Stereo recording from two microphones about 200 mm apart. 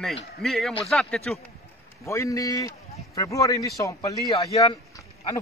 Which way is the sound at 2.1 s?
15° left (ahead or behind).